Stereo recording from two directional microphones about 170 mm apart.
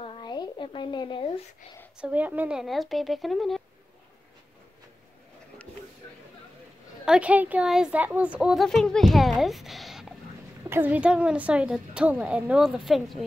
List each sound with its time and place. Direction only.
0.0 s a sound: 30° left (ahead or behind)
2.0 s a child's voice: 10° right (ahead or behind)
7.1 s a child's voice: 5° right (ahead or behind)